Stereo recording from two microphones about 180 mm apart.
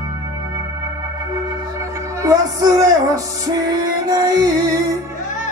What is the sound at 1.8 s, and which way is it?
Music, 20° right (ahead or behind).